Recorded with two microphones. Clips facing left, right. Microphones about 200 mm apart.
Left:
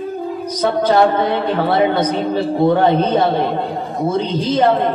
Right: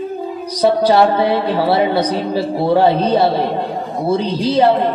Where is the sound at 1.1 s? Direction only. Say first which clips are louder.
Right 2 dB; 10° right (ahead or behind).